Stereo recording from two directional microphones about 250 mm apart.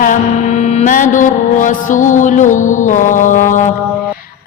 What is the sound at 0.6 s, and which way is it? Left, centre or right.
Music, left.